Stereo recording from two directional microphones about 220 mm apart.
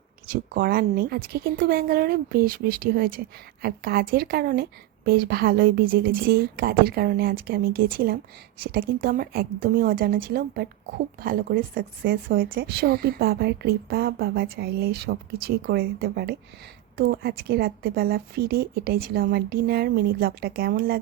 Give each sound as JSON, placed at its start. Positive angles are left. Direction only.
{"t": 0.5, "sound": "a woman's voice", "side_deg": -45}